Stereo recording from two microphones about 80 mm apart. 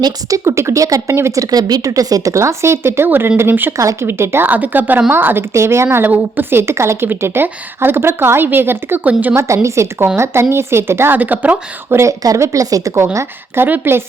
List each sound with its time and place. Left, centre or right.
0.3 s speech: right
1.5 s a woman's voice: right
9.3 s speech: right
12.2 s speech: right
13.7 s a woman's voice: right